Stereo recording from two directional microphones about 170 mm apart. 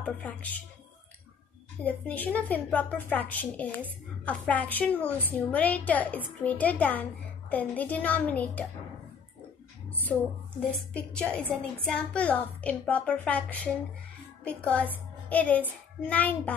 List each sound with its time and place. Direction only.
0.0 s a woman's voice: 10° left (ahead or behind)
1.8 s a woman's voice: 10° left (ahead or behind)
9.8 s a sound: 10° left (ahead or behind)
10.8 s a woman's voice: 5° left (ahead or behind)